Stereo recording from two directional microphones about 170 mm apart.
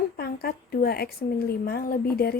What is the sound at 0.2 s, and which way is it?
A woman's voice, 65° left (ahead or behind).